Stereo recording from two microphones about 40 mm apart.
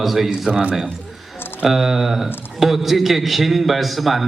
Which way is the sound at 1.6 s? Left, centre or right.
Centre.